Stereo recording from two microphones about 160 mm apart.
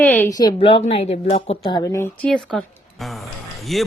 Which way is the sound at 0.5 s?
35° left (ahead or behind).